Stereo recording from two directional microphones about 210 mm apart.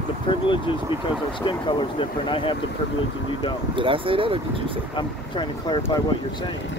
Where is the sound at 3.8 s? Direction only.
25° right (ahead or behind).